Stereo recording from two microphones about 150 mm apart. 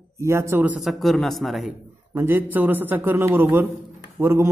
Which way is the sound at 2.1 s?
15° right (ahead or behind).